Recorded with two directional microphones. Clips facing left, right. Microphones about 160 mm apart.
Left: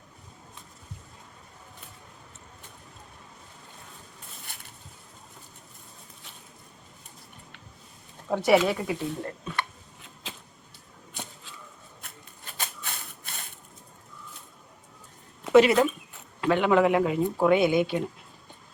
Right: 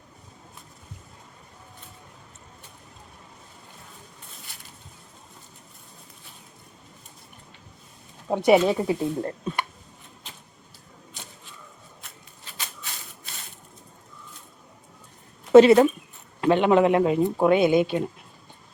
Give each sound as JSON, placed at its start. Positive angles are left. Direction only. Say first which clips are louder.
{"t": 8.3, "sound": "speech", "louder": "right 3 dB", "side_deg": -20}
{"t": 10.3, "sound": "vehicle", "louder": "left 5 dB", "side_deg": 90}
{"t": 12.0, "sound": "shuffling cards", "louder": "left 2 dB", "side_deg": 55}
{"t": 12.5, "sound": "a sound", "louder": "left 2 dB", "side_deg": 55}
{"t": 15.5, "sound": "speech", "louder": "right 6 dB", "side_deg": -30}